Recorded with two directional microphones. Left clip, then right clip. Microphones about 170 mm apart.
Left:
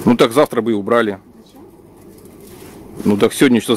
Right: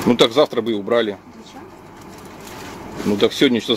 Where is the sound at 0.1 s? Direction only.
55° left (ahead or behind).